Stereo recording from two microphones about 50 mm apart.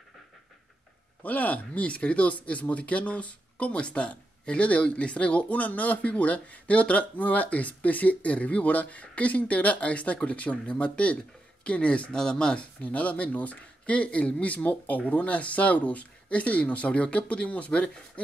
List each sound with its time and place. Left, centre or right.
1.2 s speech: left
12.8 s speech: left